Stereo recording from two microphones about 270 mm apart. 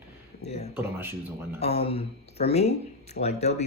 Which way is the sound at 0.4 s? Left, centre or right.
Left.